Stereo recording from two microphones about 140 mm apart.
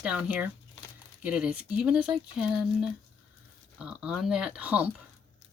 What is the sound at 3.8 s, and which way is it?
Speech, 5° right (ahead or behind).